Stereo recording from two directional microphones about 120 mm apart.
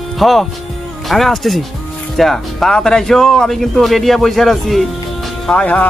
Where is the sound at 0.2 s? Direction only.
Centre (ahead or behind).